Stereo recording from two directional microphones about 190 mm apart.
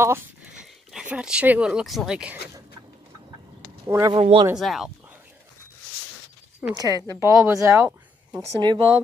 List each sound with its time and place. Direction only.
0.0 s speech: 10° right (ahead or behind)
3.8 s speech: 20° right (ahead or behind)
4.2 s speech: 30° right (ahead or behind)
4.6 s speech: centre (ahead or behind)
6.7 s speech: 20° right (ahead or behind)
8.5 s speech: 25° right (ahead or behind)